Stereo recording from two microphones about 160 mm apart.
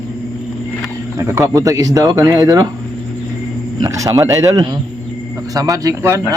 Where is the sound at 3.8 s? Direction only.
20° right (ahead or behind).